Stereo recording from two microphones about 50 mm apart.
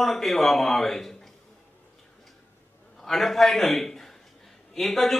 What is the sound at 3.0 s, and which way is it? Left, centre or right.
A man's voice, centre.